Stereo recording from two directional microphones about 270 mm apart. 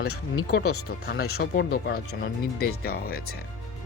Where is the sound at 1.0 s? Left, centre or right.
Left.